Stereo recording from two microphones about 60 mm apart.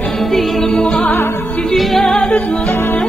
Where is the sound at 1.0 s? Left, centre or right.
Left.